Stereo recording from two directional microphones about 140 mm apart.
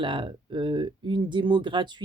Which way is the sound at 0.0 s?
35° right (ahead or behind).